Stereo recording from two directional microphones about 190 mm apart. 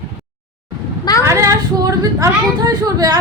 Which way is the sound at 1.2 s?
15° right (ahead or behind).